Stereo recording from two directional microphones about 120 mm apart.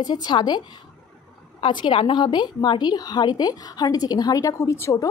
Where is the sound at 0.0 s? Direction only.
35° left (ahead or behind).